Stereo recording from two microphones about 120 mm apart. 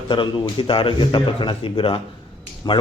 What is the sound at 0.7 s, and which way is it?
A man's voice, 45° left (ahead or behind).